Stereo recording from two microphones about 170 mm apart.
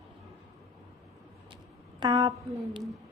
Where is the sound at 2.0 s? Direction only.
20° right (ahead or behind).